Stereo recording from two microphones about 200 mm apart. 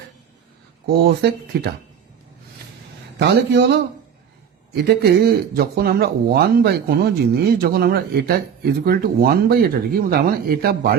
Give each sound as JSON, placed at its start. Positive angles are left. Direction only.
{"t": 0.9, "sound": "speech", "side_deg": -55}
{"t": 3.2, "sound": "a man's voice", "side_deg": -60}